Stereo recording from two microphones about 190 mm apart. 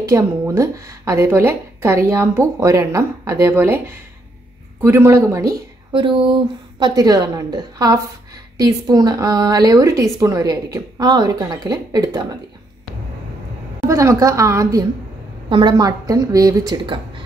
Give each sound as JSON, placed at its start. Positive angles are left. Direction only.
{"t": 0.0, "sound": "a woman's voice", "side_deg": -15}
{"t": 5.9, "sound": "a woman's voice", "side_deg": -25}
{"t": 13.8, "sound": "a woman's voice", "side_deg": -15}